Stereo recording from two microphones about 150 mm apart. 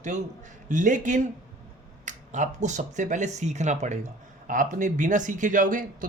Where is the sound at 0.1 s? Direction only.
50° right (ahead or behind).